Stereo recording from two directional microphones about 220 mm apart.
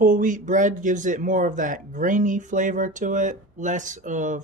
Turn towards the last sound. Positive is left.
turn(degrees=-35)  # may be behind; listen again after turning